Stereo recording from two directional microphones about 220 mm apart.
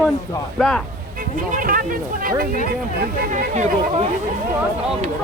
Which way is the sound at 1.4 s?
40° right (ahead or behind).